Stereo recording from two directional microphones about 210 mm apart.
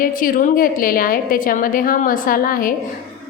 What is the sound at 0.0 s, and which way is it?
A woman's voice, 40° left (ahead or behind).